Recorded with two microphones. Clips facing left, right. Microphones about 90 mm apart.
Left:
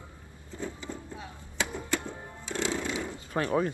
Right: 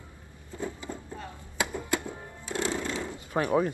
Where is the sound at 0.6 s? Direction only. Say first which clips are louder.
Right 2 dB; 10° right (ahead or behind).